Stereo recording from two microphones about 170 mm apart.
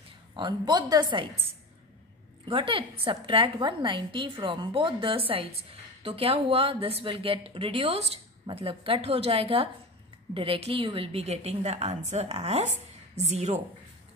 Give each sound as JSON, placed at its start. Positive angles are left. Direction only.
{"t": 0.4, "sound": "a woman's voice", "side_deg": -25}
{"t": 2.4, "sound": "a woman's voice", "side_deg": -30}